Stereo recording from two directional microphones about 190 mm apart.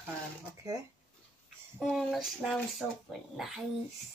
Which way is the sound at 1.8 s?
Centre (ahead or behind).